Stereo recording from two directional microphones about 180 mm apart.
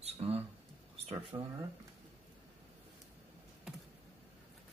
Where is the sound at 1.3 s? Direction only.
20° right (ahead or behind).